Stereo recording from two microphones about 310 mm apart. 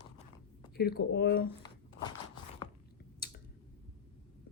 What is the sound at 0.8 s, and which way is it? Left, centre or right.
Speech, left.